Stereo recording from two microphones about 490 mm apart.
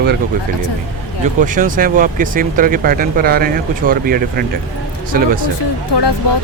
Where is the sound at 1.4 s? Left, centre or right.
Centre.